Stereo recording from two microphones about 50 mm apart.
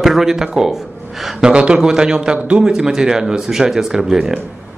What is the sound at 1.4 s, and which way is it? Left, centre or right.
A man's voice, right.